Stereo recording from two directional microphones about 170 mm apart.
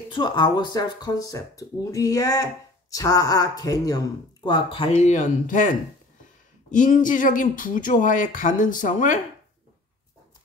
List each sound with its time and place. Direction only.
0.1 s speech: 25° left (ahead or behind); by 9.2 s 50° left (ahead or behind)